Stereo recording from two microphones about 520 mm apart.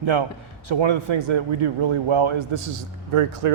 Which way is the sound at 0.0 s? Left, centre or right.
Right.